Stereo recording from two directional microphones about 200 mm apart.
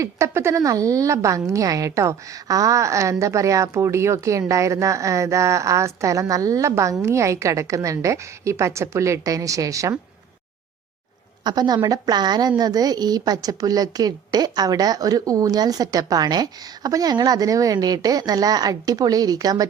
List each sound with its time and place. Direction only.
0.0 s a woman's voice: 15° right (ahead or behind)
11.4 s a woman's voice: 20° right (ahead or behind)